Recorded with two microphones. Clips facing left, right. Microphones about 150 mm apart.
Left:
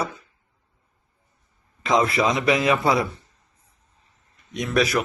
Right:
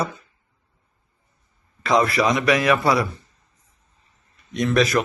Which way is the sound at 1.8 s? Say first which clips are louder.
Right 1 dB; 20° left (ahead or behind).